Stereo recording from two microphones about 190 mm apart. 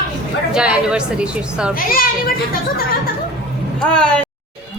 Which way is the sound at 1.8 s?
50° left (ahead or behind).